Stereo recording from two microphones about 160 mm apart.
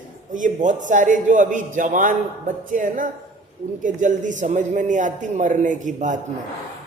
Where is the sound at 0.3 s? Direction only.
55° right (ahead or behind).